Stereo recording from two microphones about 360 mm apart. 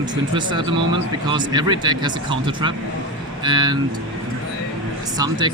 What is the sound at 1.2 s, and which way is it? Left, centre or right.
Speech, centre.